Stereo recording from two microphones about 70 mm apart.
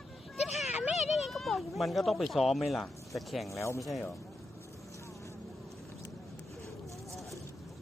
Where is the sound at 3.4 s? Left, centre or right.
Left.